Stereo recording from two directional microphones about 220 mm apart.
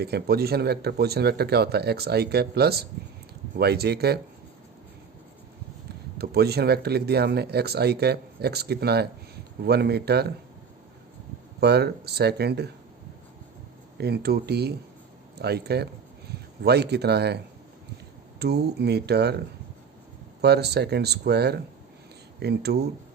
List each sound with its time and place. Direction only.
0.0 s speech: 45° right (ahead or behind)
6.1 s speech: 45° right (ahead or behind)
11.6 s speech: 45° right (ahead or behind)
14.0 s speech: 45° right (ahead or behind)
20.4 s speech: 50° right (ahead or behind)